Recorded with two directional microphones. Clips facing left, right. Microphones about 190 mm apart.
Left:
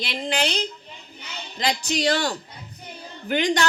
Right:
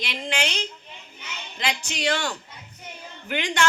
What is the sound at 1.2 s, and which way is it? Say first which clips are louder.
A man's voice: left 3 dB; 35° left (ahead or behind).